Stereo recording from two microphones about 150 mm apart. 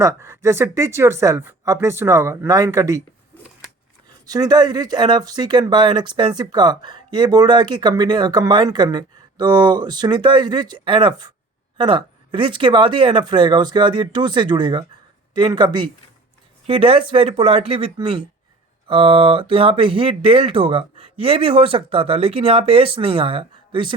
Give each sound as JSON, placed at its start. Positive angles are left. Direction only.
{"t": 0.0, "sound": "speech", "side_deg": -20}
{"t": 4.3, "sound": "speech", "side_deg": -25}